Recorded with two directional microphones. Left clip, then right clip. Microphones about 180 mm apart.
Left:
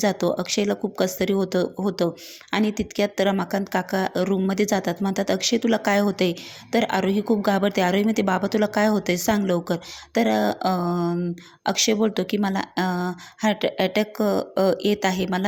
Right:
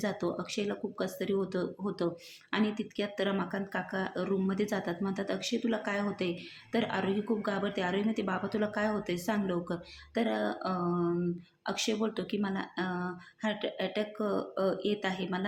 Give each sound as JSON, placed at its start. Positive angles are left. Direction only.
{"t": 0.0, "sound": "speech", "side_deg": 40}